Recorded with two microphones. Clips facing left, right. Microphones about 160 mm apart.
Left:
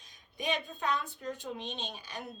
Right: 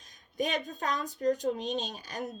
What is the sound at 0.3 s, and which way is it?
A woman's voice, 45° right (ahead or behind).